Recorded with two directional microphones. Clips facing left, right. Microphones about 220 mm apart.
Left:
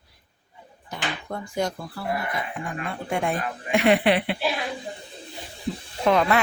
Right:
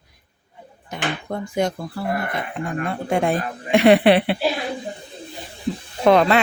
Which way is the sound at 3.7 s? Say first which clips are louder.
Right 6 dB; 70° right (ahead or behind).